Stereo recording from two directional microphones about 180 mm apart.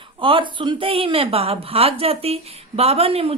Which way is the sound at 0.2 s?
30° right (ahead or behind).